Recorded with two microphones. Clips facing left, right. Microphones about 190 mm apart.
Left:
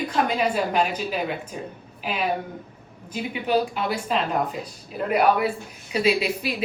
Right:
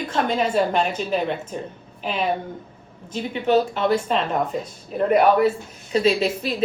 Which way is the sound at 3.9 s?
5° left (ahead or behind).